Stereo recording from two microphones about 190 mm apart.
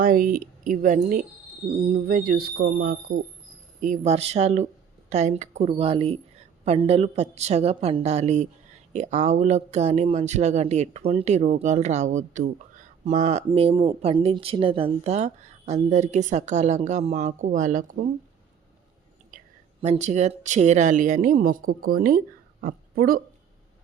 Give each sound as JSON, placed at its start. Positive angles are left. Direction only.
{"t": 0.0, "sound": "a woman's voice", "side_deg": -45}
{"t": 3.8, "sound": "speech", "side_deg": -40}
{"t": 19.3, "sound": "whispering", "side_deg": -45}
{"t": 19.8, "sound": "a woman's voice", "side_deg": -35}